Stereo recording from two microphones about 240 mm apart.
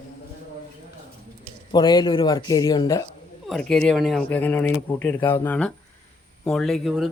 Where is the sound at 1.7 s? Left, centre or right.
Centre.